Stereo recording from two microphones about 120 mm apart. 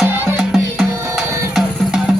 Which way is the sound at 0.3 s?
Centre (ahead or behind).